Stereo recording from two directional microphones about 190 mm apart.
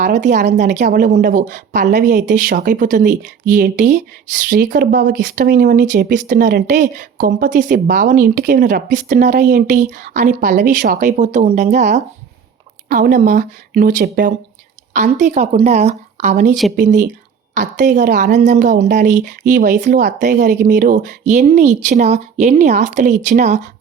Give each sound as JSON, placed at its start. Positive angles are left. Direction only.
{"t": 0.2, "sound": "speech", "side_deg": -40}
{"t": 5.5, "sound": "speech", "side_deg": -60}
{"t": 5.8, "sound": "speech", "side_deg": -45}